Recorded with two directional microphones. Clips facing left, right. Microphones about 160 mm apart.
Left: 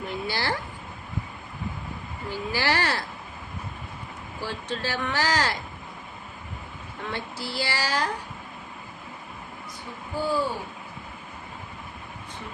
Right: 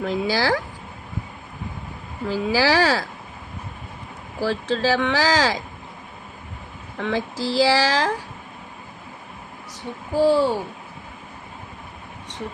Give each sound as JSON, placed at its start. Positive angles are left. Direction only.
{"t": 0.0, "sound": "speech", "side_deg": -90}
{"t": 2.3, "sound": "speech", "side_deg": -90}
{"t": 4.4, "sound": "speech", "side_deg": -90}
{"t": 7.0, "sound": "speech", "side_deg": -90}
{"t": 10.2, "sound": "a child's voice", "side_deg": -75}